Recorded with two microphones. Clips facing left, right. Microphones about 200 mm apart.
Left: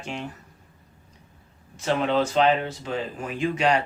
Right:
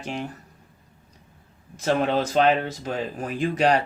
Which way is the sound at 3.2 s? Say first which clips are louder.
Right 2 dB; 35° right (ahead or behind).